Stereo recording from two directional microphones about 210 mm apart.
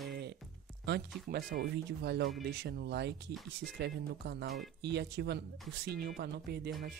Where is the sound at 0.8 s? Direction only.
50° right (ahead or behind).